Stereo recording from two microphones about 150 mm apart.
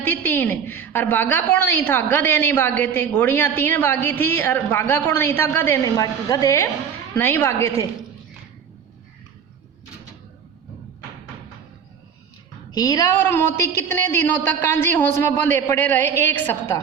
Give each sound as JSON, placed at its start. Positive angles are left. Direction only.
{"t": 0.0, "sound": "a woman's voice", "side_deg": 10}
{"t": 12.7, "sound": "a woman's voice", "side_deg": 25}